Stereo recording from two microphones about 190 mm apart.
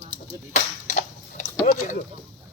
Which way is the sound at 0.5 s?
40° left (ahead or behind).